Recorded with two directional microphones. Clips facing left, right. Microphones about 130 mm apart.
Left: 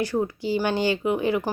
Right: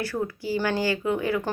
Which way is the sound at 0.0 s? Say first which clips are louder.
Left 4 dB; 20° left (ahead or behind).